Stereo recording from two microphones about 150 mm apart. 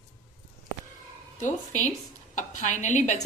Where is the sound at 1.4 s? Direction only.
55° left (ahead or behind).